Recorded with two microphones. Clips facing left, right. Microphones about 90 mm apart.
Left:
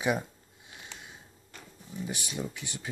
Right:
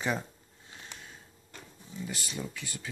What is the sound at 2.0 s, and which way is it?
Speech, 20° left (ahead or behind).